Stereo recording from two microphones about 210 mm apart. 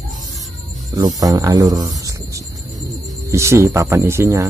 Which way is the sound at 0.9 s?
15° right (ahead or behind).